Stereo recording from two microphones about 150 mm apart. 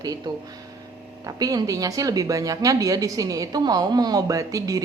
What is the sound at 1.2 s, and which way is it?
Speech, 20° right (ahead or behind).